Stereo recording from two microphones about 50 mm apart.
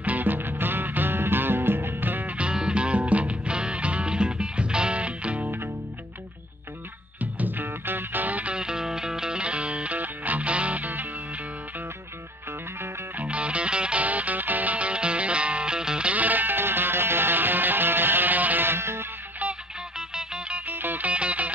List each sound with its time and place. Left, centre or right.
0.0 s music: right
2.3 s music: centre
7.2 s music: right
8.5 s music: centre; by 11.1 s right
13.2 s music: right
16.1 s music: right
18.7 s music: right
20.2 s music: right
20.6 s music: right
21.1 s music: right